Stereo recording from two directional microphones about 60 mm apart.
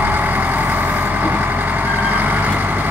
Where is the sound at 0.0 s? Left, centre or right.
Right.